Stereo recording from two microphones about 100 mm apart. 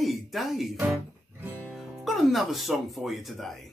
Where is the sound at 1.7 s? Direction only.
Centre (ahead or behind).